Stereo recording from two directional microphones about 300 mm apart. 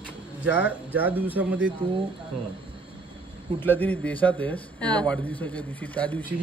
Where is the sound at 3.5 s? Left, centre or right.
Centre.